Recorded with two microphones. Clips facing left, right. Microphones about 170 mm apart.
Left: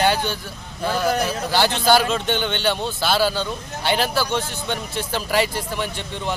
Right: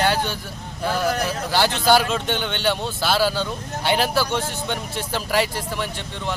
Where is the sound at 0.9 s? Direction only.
15° left (ahead or behind).